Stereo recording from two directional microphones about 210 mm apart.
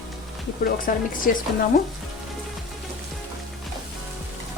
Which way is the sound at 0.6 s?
40° left (ahead or behind).